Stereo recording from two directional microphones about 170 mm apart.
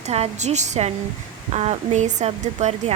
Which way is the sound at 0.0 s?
40° right (ahead or behind).